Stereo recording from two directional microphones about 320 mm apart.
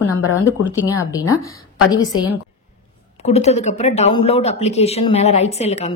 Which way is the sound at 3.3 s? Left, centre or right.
Left.